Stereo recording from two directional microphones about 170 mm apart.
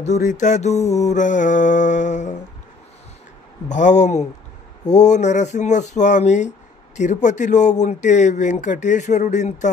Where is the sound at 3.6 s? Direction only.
45° left (ahead or behind).